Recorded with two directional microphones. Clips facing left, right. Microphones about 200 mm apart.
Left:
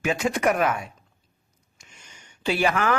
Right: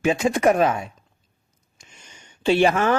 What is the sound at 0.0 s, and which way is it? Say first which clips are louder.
A man's voice: right 4 dB; 25° right (ahead or behind).